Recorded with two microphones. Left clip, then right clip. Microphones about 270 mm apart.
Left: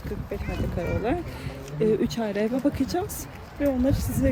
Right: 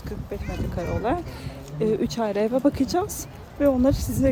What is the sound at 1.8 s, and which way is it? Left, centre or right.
Speech, centre.